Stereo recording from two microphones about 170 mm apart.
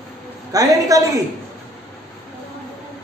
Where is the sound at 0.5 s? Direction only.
20° right (ahead or behind).